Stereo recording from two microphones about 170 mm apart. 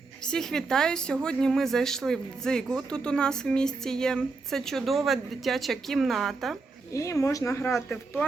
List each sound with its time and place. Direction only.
0.3 s a woman's voice: 5° left (ahead or behind)
6.9 s speech: 20° left (ahead or behind)